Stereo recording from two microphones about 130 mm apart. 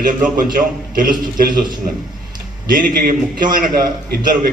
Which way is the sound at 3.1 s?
90° right.